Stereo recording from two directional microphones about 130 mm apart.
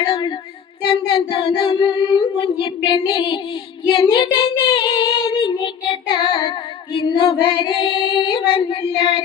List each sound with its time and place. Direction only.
0.0 s child singing: 40° left (ahead or behind)